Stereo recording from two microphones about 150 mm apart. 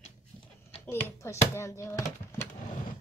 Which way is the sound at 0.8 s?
15° left (ahead or behind).